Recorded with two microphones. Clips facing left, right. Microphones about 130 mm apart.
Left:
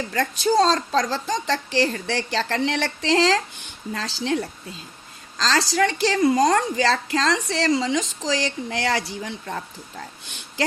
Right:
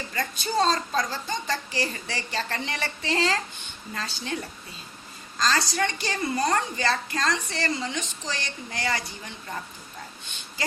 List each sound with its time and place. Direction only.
0.1 s a woman's voice: 75° left (ahead or behind)
5.4 s a woman's voice: 90° left
6.7 s a woman's voice: 80° left